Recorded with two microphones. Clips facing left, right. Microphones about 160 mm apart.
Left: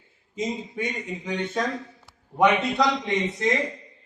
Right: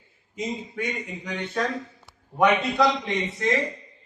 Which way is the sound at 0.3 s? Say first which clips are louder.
Left 1 dB; 20° left (ahead or behind).